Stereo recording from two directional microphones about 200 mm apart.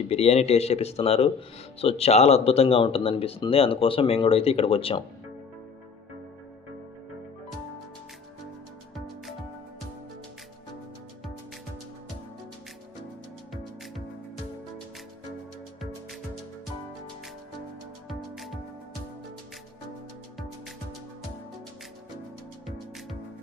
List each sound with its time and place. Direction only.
0.1 s speech: 30° left (ahead or behind)
18.1 s music: centre (ahead or behind)